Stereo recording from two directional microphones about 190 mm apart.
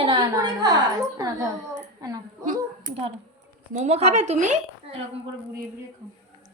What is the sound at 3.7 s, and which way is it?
A woman's voice, 40° right (ahead or behind).